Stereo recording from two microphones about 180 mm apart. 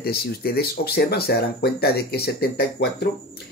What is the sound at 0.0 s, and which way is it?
Speech, 60° left (ahead or behind).